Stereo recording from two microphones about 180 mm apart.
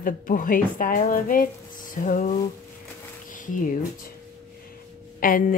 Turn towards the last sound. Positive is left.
turn(degrees=50)  # may be behind; listen again after turning